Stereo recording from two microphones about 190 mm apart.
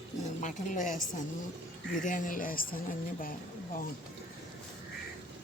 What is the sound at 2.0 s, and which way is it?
Speech, 45° left (ahead or behind).